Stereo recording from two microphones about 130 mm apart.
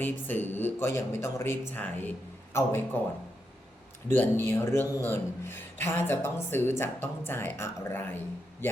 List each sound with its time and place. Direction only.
0.0 s speech: 15° left (ahead or behind)
4.1 s speech: 15° left (ahead or behind)